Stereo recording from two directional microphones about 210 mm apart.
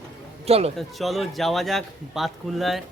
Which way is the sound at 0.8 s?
Centre (ahead or behind).